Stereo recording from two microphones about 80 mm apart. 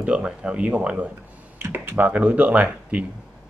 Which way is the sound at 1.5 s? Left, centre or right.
Right.